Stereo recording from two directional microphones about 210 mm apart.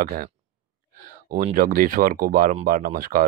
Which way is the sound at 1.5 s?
40° right (ahead or behind).